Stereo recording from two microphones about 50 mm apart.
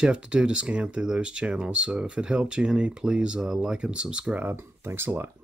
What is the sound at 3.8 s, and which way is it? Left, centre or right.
Speech, right.